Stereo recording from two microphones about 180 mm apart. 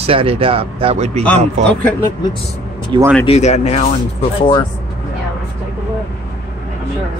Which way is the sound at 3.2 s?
35° left (ahead or behind).